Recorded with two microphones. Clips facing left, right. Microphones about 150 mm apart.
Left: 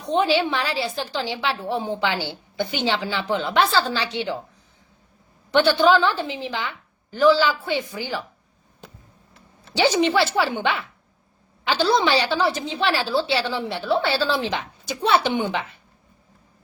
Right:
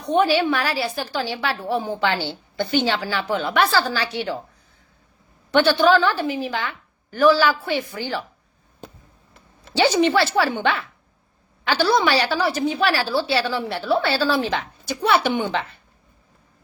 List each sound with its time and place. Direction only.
0.1 s a woman's voice: 20° left (ahead or behind)
5.8 s a woman's voice: 20° left (ahead or behind)
10.0 s a woman's voice: 15° left (ahead or behind)